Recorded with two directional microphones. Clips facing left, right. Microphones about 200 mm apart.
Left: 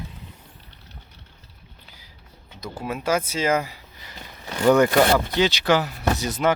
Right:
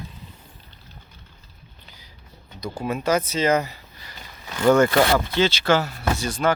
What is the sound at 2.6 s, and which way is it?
Speech, 5° left (ahead or behind).